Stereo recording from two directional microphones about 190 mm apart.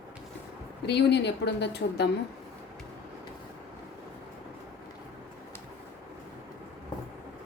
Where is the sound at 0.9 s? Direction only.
60° left (ahead or behind).